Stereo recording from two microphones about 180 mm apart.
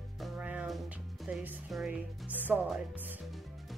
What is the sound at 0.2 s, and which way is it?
Music, 10° right (ahead or behind).